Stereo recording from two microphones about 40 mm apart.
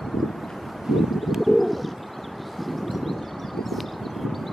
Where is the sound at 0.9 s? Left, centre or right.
Centre.